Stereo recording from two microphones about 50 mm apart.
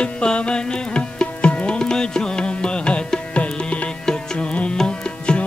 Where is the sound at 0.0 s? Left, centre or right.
Left.